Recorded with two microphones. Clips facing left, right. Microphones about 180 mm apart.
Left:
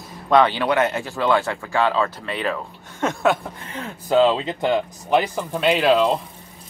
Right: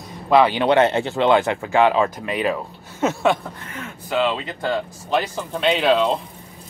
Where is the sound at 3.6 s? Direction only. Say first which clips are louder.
Left 7 dB; 35° left (ahead or behind); by 6.1 s 5° left (ahead or behind).